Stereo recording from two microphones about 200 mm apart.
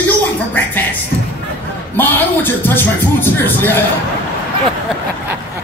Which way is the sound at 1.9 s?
10° left (ahead or behind).